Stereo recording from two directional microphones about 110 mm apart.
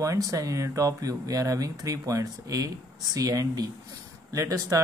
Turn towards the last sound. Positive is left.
turn(degrees=-30)  # may be behind; listen again after turning